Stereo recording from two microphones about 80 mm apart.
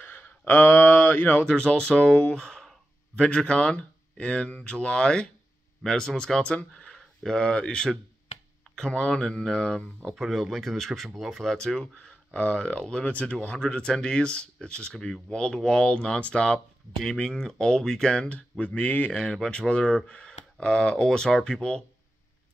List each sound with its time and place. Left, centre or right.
0.0 s a sound: left
1.5 s speech: centre
10.1 s speech: centre